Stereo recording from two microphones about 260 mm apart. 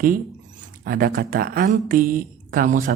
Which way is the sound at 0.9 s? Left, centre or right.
Right.